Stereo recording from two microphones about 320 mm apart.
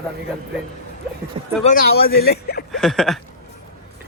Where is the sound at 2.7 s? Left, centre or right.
Centre.